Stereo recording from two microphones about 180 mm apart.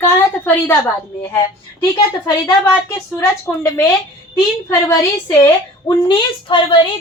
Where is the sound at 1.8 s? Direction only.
20° left (ahead or behind).